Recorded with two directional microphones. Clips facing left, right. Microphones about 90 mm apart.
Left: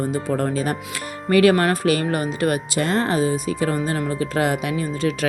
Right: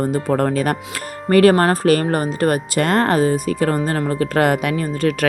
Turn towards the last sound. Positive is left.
turn(degrees=-55)  # may be behind; listen again after turning